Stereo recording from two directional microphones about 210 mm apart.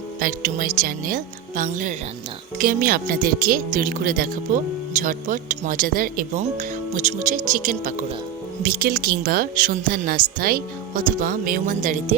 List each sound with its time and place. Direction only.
0.2 s a woman's voice: 40° right (ahead or behind)